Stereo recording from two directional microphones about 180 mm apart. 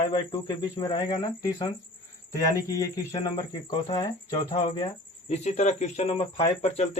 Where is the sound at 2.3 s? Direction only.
20° left (ahead or behind); by 6.9 s 35° left (ahead or behind).